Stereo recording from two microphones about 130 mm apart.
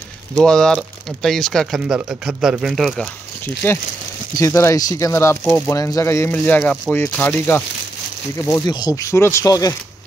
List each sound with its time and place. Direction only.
0.4 s speech: 5° left (ahead or behind)
3.6 s speech: 15° left (ahead or behind)